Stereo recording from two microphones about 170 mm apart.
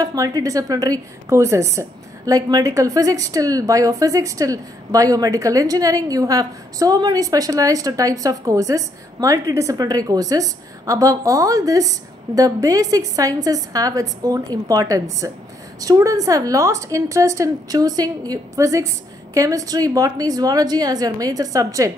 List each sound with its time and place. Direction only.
0.0 s a woman's voice: 20° right (ahead or behind)